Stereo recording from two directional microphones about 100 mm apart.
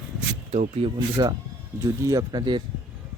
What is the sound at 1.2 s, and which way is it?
Speech, 45° right (ahead or behind).